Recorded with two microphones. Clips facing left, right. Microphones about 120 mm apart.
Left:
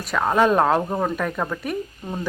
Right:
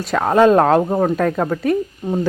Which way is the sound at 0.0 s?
30° right (ahead or behind).